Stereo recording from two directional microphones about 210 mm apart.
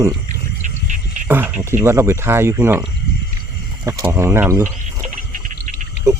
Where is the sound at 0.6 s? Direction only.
35° right (ahead or behind).